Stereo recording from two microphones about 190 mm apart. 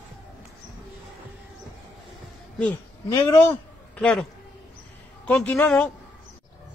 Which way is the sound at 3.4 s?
5° left (ahead or behind).